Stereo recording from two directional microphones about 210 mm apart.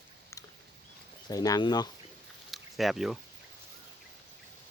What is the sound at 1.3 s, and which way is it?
Speech, 20° left (ahead or behind).